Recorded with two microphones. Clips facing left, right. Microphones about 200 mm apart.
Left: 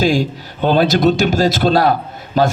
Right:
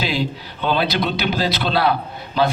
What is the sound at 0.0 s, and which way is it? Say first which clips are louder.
A man's voice: left 7 dB; 45° left (ahead or behind).